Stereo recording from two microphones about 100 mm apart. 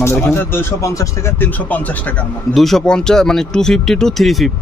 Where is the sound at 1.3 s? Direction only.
20° left (ahead or behind).